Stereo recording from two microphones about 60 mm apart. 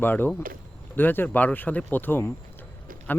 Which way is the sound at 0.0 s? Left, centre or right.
Left.